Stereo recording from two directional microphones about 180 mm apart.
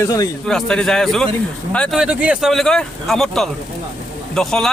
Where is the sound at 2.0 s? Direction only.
5° right (ahead or behind).